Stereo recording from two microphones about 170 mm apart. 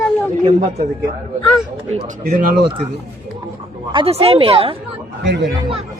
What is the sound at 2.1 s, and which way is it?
Speech, 45° right (ahead or behind).